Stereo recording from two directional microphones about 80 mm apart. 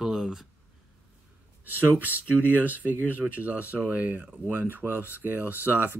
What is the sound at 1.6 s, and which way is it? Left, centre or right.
Speech, right.